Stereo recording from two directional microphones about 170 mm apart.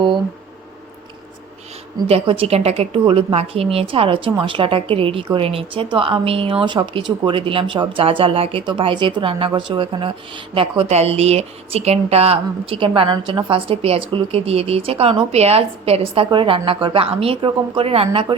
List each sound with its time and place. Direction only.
2.0 s speech: 35° right (ahead or behind)